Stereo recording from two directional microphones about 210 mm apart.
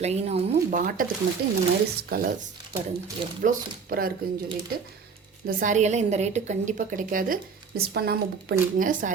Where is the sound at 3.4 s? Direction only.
45° right (ahead or behind).